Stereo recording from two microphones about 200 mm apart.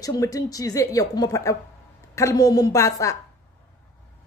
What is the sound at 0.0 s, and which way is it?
A woman's voice, 15° left (ahead or behind).